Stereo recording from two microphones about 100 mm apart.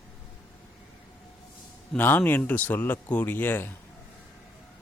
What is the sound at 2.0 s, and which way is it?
Speech, 20° left (ahead or behind).